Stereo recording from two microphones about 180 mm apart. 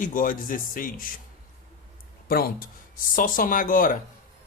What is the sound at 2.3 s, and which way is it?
A man's voice, 55° left (ahead or behind).